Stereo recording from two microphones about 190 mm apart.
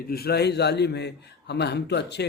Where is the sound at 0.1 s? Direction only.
55° left (ahead or behind).